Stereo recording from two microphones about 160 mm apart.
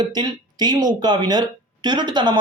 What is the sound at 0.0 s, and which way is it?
Speech, 25° right (ahead or behind).